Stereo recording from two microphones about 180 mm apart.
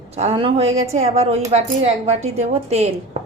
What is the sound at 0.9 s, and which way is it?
A woman's voice, 35° right (ahead or behind).